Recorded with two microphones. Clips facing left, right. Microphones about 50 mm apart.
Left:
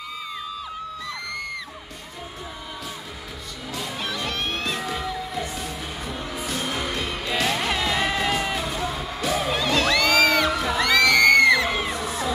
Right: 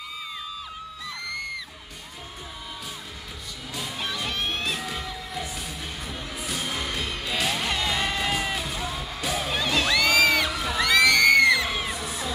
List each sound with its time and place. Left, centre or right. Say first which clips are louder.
3.7 s music: left 2 dB; centre